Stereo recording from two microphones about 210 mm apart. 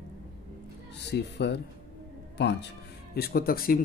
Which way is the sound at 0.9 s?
55° left (ahead or behind).